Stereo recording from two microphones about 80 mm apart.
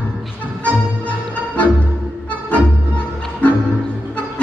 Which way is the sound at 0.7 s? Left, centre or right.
Centre.